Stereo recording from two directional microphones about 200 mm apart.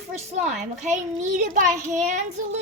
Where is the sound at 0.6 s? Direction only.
40° right (ahead or behind).